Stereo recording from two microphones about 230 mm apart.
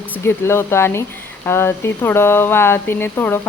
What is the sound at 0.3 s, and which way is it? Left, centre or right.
Speech, centre.